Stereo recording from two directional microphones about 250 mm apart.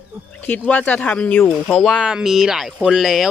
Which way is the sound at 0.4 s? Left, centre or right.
Centre.